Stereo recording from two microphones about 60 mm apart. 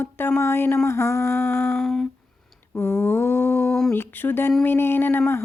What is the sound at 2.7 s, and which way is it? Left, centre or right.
Mantra, left.